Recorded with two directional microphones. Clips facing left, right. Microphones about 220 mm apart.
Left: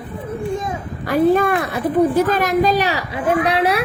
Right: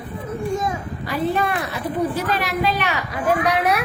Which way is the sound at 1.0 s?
50° left (ahead or behind).